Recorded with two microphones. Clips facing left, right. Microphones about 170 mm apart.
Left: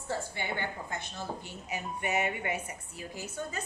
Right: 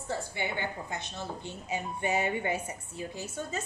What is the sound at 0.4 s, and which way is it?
Speech, 15° right (ahead or behind).